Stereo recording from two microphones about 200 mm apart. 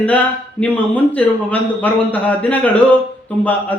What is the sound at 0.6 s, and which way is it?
Speech, 5° left (ahead or behind).